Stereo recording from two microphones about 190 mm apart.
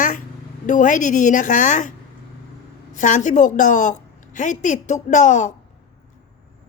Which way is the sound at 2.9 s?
40° left (ahead or behind).